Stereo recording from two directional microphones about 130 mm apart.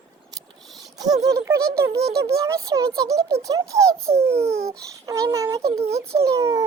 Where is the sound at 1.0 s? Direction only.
30° right (ahead or behind).